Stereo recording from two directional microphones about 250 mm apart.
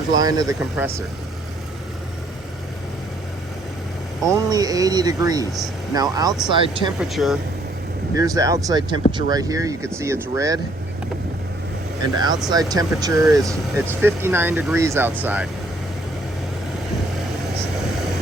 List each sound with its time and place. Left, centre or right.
0.1 s speech: centre
4.3 s speech: centre
7.0 s speech: centre
8.1 s speech: centre
12.1 s speech: centre